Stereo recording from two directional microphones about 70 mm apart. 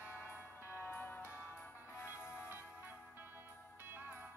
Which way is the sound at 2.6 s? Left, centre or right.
Right.